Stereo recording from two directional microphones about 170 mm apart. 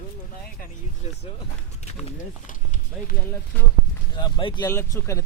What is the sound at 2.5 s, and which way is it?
Run, 50° left (ahead or behind).